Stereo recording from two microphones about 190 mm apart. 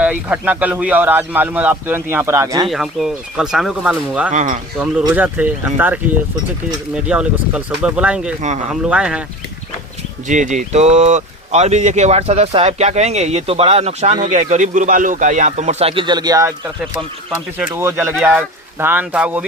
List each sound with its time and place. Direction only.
0.0 s speech: 10° right (ahead or behind)
2.6 s speech: centre (ahead or behind)
4.3 s speech: 45° right (ahead or behind)
5.1 s speech: 10° right (ahead or behind)
10.2 s speech: 40° right (ahead or behind); by 19.5 s 5° right (ahead or behind)